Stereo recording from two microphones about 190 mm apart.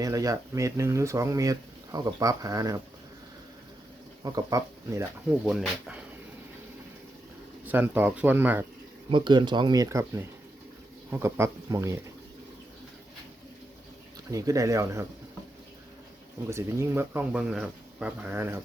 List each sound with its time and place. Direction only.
0.0 s speech: 20° right (ahead or behind)
4.2 s speech: 20° right (ahead or behind)
5.3 s speech: 5° right (ahead or behind)
7.6 s speech: 10° right (ahead or behind)
9.0 s speech: 25° right (ahead or behind)
14.3 s speech: 15° right (ahead or behind)
16.5 s speech: 15° right (ahead or behind)